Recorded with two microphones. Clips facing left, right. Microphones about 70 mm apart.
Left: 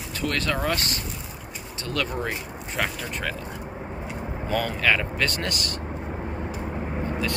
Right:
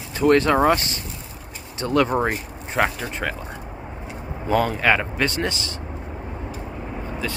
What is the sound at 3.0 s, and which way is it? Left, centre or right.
Speech, centre.